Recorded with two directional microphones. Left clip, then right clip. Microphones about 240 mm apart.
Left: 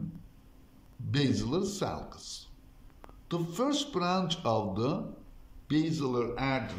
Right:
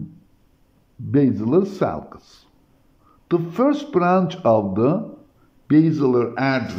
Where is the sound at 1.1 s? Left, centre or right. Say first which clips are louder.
Right 12 dB; right.